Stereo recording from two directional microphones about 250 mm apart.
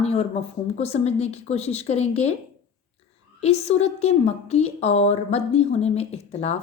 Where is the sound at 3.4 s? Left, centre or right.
Left.